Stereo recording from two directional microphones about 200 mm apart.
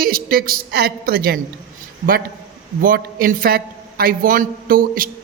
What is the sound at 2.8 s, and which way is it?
A man's voice, 45° right (ahead or behind).